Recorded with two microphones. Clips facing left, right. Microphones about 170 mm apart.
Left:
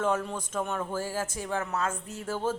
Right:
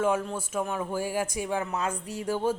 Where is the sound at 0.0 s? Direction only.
10° right (ahead or behind).